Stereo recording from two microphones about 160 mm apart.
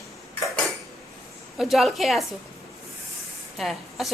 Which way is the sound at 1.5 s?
Centre (ahead or behind).